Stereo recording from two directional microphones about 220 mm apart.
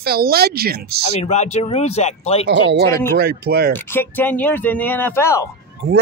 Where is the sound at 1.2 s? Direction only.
30° left (ahead or behind).